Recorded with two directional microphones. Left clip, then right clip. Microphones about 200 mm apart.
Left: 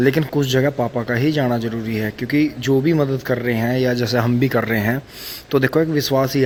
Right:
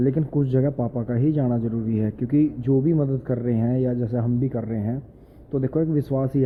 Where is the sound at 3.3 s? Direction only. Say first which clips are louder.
Left 6 dB; 5° left (ahead or behind).